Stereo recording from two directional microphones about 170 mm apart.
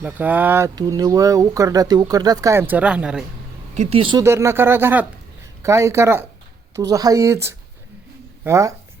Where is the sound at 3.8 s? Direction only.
35° right (ahead or behind).